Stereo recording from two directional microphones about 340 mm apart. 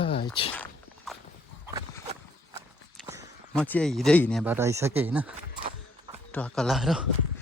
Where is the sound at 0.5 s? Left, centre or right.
Centre.